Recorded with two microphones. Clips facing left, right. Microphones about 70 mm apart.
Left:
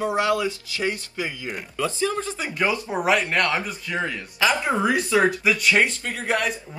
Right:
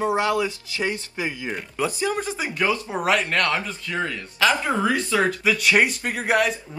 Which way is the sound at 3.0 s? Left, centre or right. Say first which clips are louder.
Left 1 dB; centre.